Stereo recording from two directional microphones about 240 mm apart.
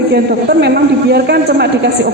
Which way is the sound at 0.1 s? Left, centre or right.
Right.